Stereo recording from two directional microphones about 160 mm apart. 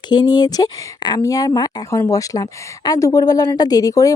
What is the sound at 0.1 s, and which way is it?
Speech, 25° left (ahead or behind).